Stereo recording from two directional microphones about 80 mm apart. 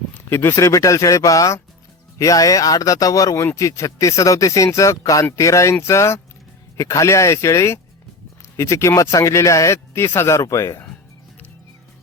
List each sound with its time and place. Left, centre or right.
0.3 s speech: left